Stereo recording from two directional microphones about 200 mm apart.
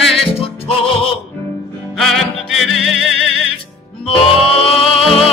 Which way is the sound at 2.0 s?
Centre (ahead or behind).